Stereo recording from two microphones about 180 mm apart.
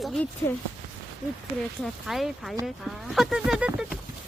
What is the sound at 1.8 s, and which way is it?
Speech, centre (ahead or behind).